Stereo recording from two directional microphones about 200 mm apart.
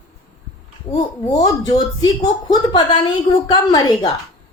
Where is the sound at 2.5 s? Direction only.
20° left (ahead or behind).